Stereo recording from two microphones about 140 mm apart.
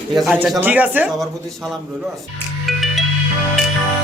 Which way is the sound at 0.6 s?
10° right (ahead or behind).